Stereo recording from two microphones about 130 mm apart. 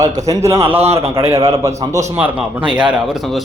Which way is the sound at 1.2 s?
55° right (ahead or behind).